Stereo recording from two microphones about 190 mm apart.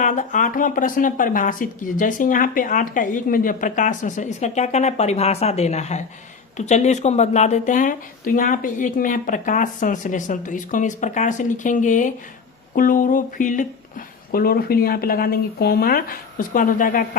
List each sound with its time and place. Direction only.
0.0 s speech: 40° left (ahead or behind)